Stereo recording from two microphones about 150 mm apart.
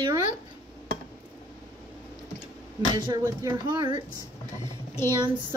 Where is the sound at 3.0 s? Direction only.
30° right (ahead or behind).